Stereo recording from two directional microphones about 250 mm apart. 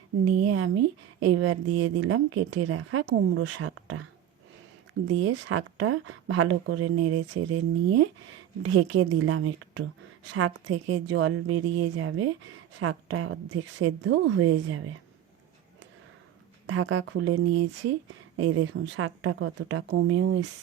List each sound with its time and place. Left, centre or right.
0.4 s speech: right
5.0 s speech: right
16.6 s speech: right
18.3 s speech: right